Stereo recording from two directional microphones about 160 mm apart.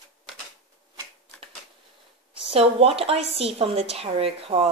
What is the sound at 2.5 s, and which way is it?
A woman's voice, 40° right (ahead or behind).